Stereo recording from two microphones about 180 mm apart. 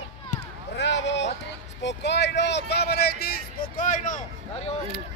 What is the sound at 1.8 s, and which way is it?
Speech, 70° left (ahead or behind).